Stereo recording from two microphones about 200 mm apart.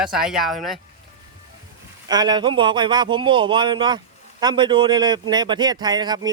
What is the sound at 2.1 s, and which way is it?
A man's voice, 20° right (ahead or behind).